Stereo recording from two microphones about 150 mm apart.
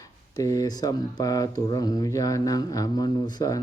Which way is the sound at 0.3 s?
20° left (ahead or behind).